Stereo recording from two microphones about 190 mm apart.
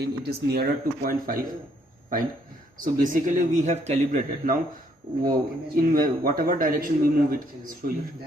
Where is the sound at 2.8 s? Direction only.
45° right (ahead or behind).